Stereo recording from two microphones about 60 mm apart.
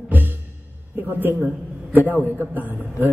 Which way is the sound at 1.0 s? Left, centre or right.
Right.